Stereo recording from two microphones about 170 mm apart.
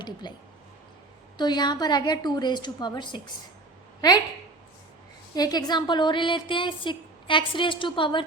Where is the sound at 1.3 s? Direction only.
25° left (ahead or behind).